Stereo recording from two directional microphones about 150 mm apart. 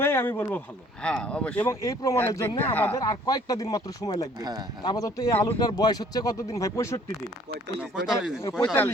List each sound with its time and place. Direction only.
0.0 s speech: 15° left (ahead or behind)
1.6 s speech: 20° left (ahead or behind)
3.0 s speech: 25° left (ahead or behind)
4.4 s speech: 25° right (ahead or behind)
4.8 s speech: 25° left (ahead or behind)
5.5 s speech: 25° left (ahead or behind)
7.8 s speech: 5° right (ahead or behind)
8.5 s speech: 10° left (ahead or behind)